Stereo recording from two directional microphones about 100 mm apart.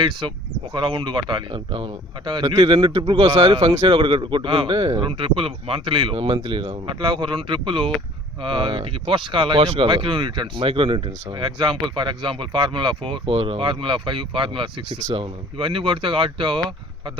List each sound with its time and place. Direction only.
0.0 s speech: 50° right (ahead or behind)